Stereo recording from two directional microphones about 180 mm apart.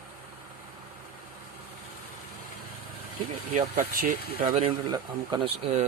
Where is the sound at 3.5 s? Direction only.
50° right (ahead or behind).